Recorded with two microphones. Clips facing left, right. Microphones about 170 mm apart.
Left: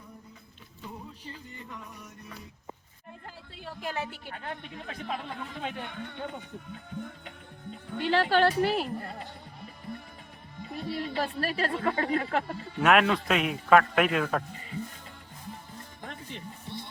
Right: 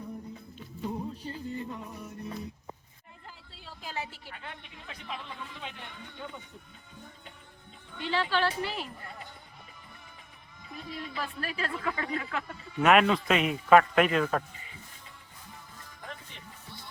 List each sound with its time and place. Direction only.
1.3 s music: 30° right (ahead or behind)
3.2 s speech: 60° left (ahead or behind)
7.9 s speech: 55° left (ahead or behind)
8.2 s speech: 45° left (ahead or behind)
10.6 s speech: 35° left (ahead or behind)
12.8 s a man's voice: centre (ahead or behind)
14.5 s music: 45° left (ahead or behind)
16.6 s music: 25° left (ahead or behind)